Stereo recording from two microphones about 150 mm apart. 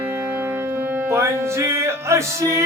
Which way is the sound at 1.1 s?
15° right (ahead or behind).